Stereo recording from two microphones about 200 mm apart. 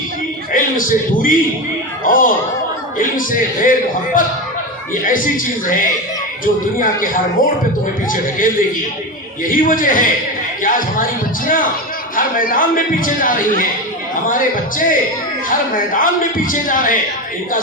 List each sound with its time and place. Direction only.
0.5 s a man's voice: 40° left (ahead or behind)
16.0 s a man's voice: 45° left (ahead or behind)